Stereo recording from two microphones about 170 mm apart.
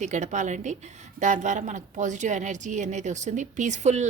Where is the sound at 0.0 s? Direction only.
45° right (ahead or behind).